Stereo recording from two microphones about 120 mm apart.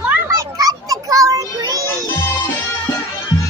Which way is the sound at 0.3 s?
30° right (ahead or behind).